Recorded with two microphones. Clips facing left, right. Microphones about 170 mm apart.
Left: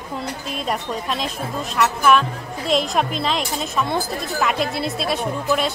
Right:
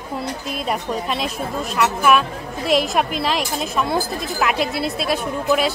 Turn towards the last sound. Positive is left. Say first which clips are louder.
# right 2 dB
turn(degrees=0)  # may be behind; listen again after turning